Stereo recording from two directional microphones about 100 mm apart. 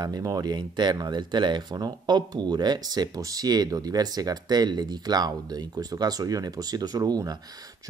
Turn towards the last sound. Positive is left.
turn(degrees=-40)  # may be behind; listen again after turning